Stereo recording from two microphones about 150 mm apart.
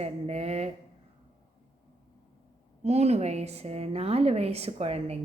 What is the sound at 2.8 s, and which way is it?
A woman's voice, 45° right (ahead or behind).